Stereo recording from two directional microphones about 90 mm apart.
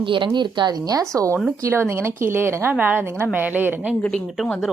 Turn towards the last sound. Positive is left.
turn(degrees=-20)  # may be behind; listen again after turning